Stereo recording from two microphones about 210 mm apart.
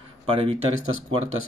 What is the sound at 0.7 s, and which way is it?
Speech, 75° right (ahead or behind).